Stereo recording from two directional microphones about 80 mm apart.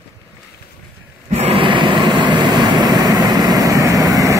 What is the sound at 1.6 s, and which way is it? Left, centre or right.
Vehicle, right.